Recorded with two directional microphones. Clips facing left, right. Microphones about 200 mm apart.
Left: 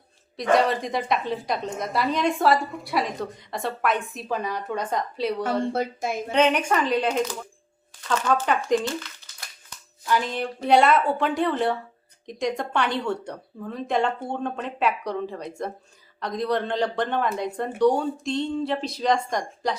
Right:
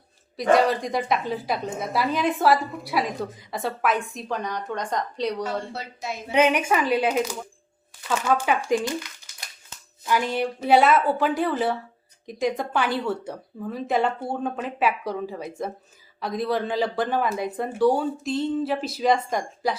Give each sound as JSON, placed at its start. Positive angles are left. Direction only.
{"t": 0.3, "sound": "a woman's voice", "side_deg": 0}
{"t": 5.7, "sound": "a woman's voice", "side_deg": 50}
{"t": 6.3, "sound": "a woman's voice", "side_deg": -10}